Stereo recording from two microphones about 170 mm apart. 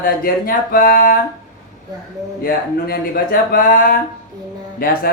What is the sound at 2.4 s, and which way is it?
Speech, 60° left (ahead or behind).